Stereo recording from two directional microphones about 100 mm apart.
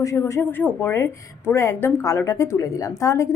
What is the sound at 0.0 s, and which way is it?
A woman's voice, 30° left (ahead or behind).